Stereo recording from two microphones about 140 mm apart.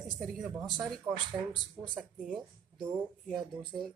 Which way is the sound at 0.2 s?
Centre (ahead or behind).